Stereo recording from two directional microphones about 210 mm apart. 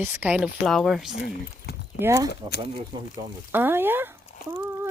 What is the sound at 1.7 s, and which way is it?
Keys jangling, 50° left (ahead or behind).